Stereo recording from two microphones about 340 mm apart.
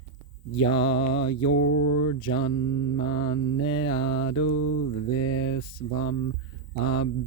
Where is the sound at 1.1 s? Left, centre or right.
Left.